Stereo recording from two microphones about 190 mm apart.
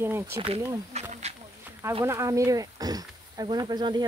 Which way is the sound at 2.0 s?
15° right (ahead or behind).